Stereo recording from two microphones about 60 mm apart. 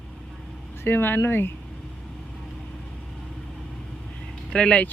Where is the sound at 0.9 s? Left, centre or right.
Left.